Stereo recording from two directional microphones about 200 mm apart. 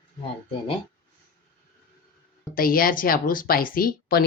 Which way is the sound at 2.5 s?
45° left (ahead or behind).